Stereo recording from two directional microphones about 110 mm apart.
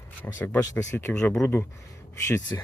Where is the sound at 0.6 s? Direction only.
30° left (ahead or behind).